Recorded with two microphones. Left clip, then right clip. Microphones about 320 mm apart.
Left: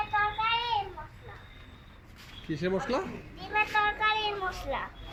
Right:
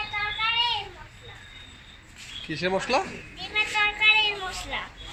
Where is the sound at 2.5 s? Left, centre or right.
Centre.